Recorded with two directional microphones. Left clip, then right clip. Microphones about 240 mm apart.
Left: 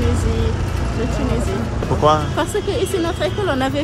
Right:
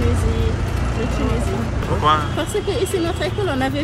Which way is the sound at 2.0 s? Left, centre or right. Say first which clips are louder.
Left 2 dB; left.